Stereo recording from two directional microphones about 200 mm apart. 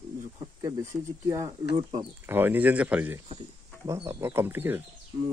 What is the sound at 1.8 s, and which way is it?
Speech, 30° right (ahead or behind).